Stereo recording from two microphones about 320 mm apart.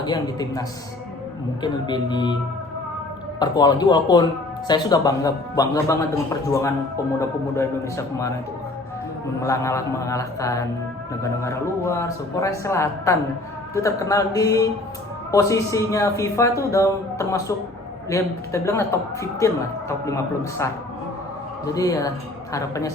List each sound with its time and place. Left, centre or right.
0.0 s speech: centre
1.6 s speech: centre
3.4 s speech: centre
9.4 s speech: centre
21.8 s speech: centre